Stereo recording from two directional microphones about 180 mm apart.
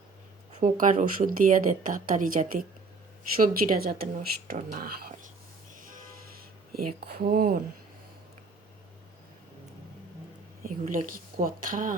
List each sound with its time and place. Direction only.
0.5 s speech: 45° right (ahead or behind)
6.3 s speech: 60° right (ahead or behind)
10.6 s speech: 50° right (ahead or behind)